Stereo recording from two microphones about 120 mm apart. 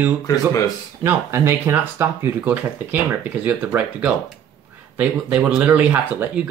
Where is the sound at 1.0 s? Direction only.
20° right (ahead or behind).